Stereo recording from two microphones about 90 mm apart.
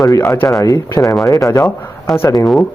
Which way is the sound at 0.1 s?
35° left (ahead or behind).